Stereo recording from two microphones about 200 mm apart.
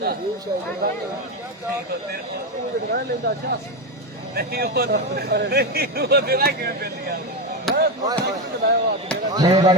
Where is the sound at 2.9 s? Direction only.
50° right (ahead or behind).